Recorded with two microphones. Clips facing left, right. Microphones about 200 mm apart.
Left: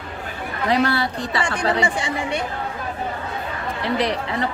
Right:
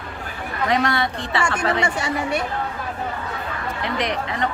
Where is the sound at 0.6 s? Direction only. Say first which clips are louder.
Left 1 dB; 35° left (ahead or behind).